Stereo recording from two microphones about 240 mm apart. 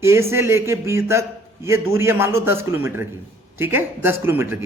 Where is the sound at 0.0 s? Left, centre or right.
Centre.